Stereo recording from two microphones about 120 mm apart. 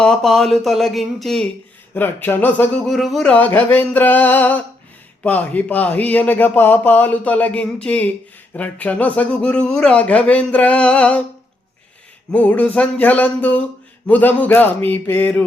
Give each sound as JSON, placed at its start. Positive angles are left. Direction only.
{"t": 0.0, "sound": "speech", "side_deg": 5}
{"t": 1.9, "sound": "speech", "side_deg": 15}
{"t": 2.8, "sound": "speech", "side_deg": 0}
{"t": 3.3, "sound": "speech", "side_deg": 15}
{"t": 12.3, "sound": "speech", "side_deg": 10}